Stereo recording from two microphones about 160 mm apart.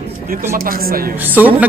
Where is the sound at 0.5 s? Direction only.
65° right (ahead or behind).